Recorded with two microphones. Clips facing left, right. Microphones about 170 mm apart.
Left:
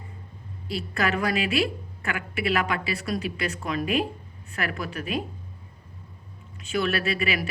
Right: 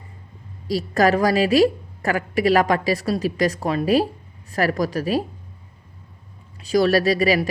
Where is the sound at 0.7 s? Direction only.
40° right (ahead or behind).